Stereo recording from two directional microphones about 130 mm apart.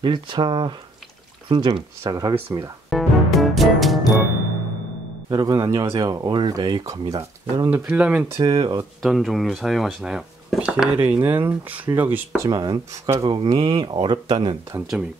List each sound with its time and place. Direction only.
0.0 s speech: 35° right (ahead or behind)
2.9 s music: centre (ahead or behind)
5.3 s speech: 30° right (ahead or behind)
7.7 s speech: 10° right (ahead or behind)
8.4 s speech: 35° right (ahead or behind)
9.0 s speech: centre (ahead or behind)
12.4 s speech: 30° right (ahead or behind)
14.7 s speech: 20° right (ahead or behind)